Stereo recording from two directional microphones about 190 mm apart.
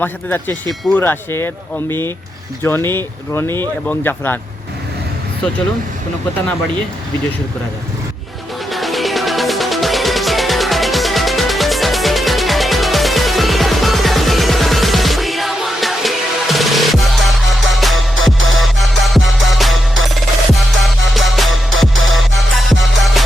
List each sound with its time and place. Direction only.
0.0 s speech: 10° left (ahead or behind)
8.7 s music: centre (ahead or behind)
18.3 s music: 90° right
18.6 s music: centre (ahead or behind)